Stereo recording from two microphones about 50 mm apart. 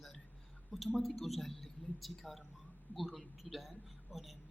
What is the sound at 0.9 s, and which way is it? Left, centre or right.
A woman's voice, centre.